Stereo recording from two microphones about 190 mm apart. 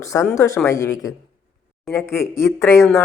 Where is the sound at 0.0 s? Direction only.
15° left (ahead or behind).